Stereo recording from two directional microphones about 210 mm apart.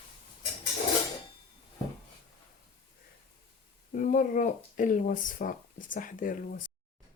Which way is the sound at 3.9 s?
40° left (ahead or behind).